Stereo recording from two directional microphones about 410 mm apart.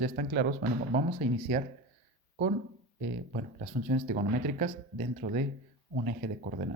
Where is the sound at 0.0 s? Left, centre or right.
Right.